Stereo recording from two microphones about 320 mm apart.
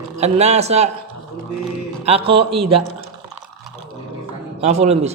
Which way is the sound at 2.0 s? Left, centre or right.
Centre.